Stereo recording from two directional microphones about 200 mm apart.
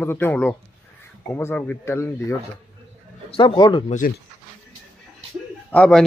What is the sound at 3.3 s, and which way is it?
Speech, 25° left (ahead or behind).